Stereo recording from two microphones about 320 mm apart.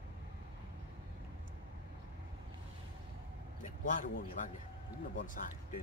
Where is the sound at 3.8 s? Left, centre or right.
Left.